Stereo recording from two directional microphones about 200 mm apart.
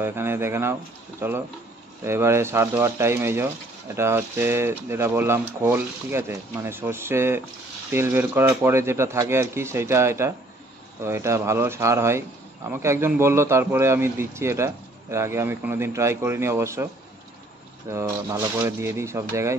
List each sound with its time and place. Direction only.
0.0 s speech: 10° right (ahead or behind)